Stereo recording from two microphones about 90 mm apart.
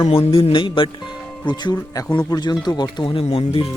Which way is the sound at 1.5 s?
50° left (ahead or behind).